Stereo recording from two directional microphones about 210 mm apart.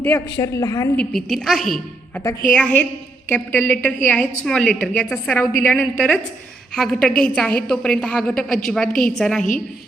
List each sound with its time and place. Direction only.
0.3 s a woman's voice: 15° left (ahead or behind)
0.9 s a woman's voice: centre (ahead or behind)